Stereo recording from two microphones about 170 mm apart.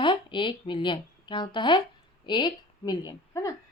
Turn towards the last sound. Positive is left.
turn(degrees=20)  # may be behind; listen again after turning